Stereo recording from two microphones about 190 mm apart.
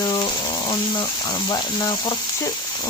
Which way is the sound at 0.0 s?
25° left (ahead or behind).